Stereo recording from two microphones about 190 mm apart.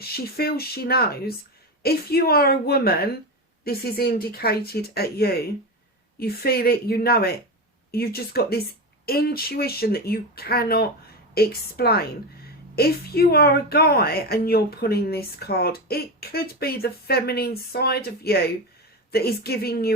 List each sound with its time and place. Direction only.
0.0 s a woman's voice: 55° left (ahead or behind)